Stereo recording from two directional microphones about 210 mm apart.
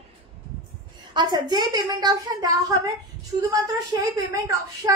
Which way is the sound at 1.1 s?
20° right (ahead or behind).